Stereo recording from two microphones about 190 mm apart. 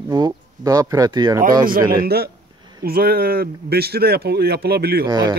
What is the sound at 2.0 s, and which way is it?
Speech, 55° right (ahead or behind).